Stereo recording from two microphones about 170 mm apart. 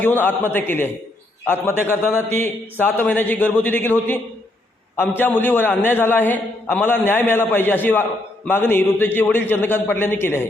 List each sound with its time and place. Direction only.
0.0 s a man's voice: 10° left (ahead or behind)